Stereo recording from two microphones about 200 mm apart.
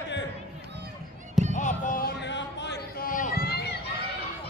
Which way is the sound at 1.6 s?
40° left (ahead or behind).